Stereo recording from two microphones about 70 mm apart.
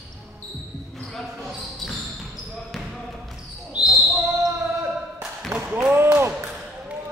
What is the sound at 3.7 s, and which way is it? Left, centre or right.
Basketball bounce, centre.